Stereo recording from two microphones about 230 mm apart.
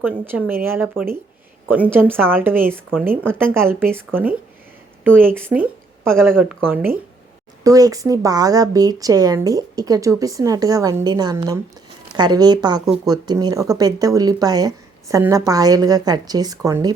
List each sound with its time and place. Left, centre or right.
0.0 s speech: centre
6.3 s speech: centre
6.7 s speech: centre